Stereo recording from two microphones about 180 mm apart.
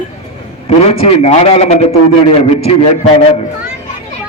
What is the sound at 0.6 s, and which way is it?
A man's voice, 35° left (ahead or behind).